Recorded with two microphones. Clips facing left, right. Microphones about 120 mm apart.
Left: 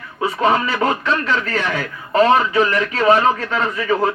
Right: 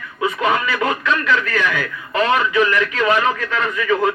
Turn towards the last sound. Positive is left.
turn(degrees=35)  # may be behind; listen again after turning